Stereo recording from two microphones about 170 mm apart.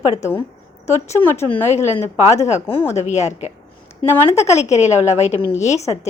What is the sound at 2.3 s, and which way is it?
A woman's voice, 40° left (ahead or behind).